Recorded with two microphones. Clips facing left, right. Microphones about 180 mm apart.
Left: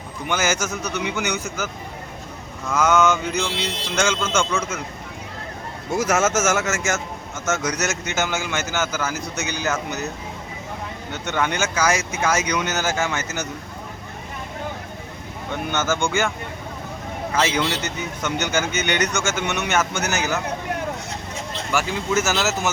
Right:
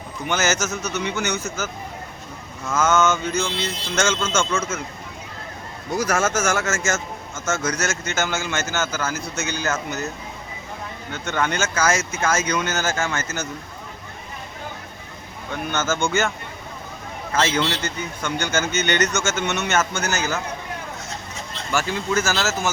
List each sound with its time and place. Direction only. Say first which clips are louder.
0.3 s a man's voice: even; 10° left (ahead or behind)
2.7 s a man's voice: left 1 dB; 15° left (ahead or behind)
6.0 s a man's voice: left 2 dB; 20° left (ahead or behind)
11.1 s a man's voice: even; 15° left (ahead or behind)
15.7 s a man's voice: even; 15° left (ahead or behind)
17.3 s a man's voice: even; 15° left (ahead or behind)
21.7 s a man's voice: even; 15° left (ahead or behind)